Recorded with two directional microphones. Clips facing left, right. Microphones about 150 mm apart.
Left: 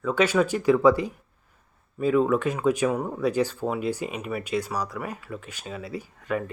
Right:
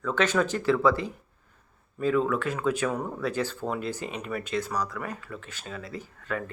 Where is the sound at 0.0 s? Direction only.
10° left (ahead or behind).